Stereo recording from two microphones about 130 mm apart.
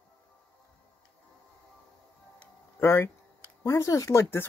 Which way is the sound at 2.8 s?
15° left (ahead or behind).